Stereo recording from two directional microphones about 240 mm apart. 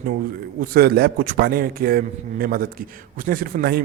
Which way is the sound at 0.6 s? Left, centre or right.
Right.